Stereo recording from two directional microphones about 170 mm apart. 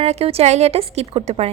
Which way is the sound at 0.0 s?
40° right (ahead or behind).